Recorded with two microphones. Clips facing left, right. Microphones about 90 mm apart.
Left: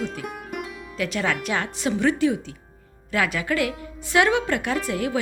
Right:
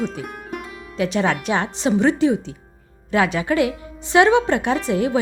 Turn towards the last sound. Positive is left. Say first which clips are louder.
# right 5 dB
turn(degrees=-25)  # may be behind; listen again after turning